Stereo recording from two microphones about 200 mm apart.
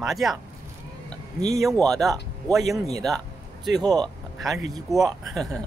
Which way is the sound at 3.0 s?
Centre (ahead or behind).